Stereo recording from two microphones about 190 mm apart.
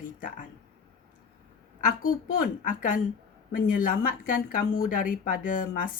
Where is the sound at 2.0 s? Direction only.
45° left (ahead or behind).